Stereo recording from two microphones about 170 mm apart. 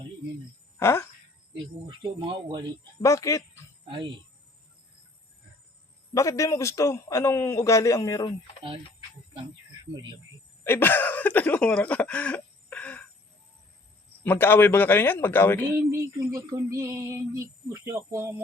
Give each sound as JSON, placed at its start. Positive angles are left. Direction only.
{"t": 0.8, "sound": "speech", "side_deg": 15}
{"t": 1.5, "sound": "speech", "side_deg": -30}
{"t": 3.0, "sound": "a man's voice", "side_deg": 20}
{"t": 3.8, "sound": "speech", "side_deg": -30}
{"t": 6.1, "sound": "a man's voice", "side_deg": 20}
{"t": 10.6, "sound": "speech", "side_deg": 15}
{"t": 14.3, "sound": "speech", "side_deg": 10}
{"t": 15.8, "sound": "female singing", "side_deg": -15}